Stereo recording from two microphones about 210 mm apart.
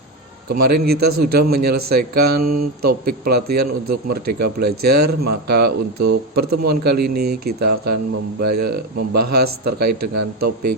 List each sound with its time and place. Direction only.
0.5 s a man's voice: 45° right (ahead or behind)